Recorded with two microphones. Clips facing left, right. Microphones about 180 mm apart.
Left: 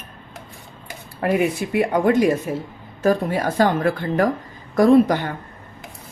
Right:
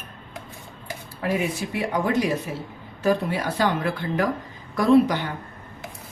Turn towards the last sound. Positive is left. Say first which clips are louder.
# left 3 dB
turn(degrees=50)  # may be behind; listen again after turning